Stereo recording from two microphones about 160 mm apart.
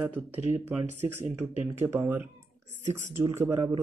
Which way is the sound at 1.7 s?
15° right (ahead or behind).